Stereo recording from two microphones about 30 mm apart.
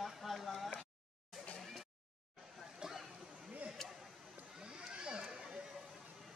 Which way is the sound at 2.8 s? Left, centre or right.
Centre.